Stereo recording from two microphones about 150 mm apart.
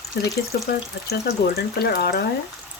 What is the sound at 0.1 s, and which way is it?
Speech, 90° left.